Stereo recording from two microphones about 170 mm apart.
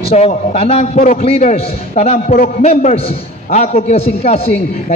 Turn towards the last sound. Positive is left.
turn(degrees=40)  # may be behind; listen again after turning